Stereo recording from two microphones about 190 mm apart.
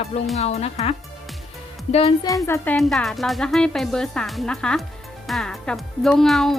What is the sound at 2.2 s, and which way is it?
Speech, 15° left (ahead or behind).